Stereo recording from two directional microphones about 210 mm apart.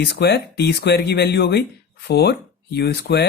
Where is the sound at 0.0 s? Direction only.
55° left (ahead or behind).